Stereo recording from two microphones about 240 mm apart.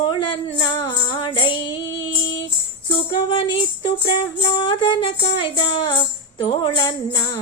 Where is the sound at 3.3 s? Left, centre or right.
Left.